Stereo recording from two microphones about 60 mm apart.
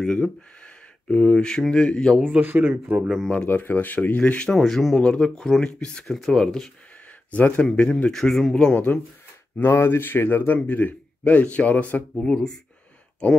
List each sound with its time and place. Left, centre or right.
0.0 s speech: centre
2.4 s speech: centre
2.7 s speech: right
3.4 s a man's voice: left
4.6 s speech: centre
5.0 s speech: centre
7.2 s a man's voice: left
8.1 s speech: centre
8.7 s a man's voice: left
9.7 s a man's voice: left; by 12.5 s centre